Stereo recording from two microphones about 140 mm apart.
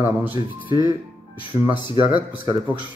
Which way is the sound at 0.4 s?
30° right (ahead or behind).